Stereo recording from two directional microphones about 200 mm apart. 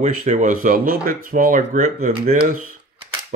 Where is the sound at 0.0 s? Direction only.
40° right (ahead or behind).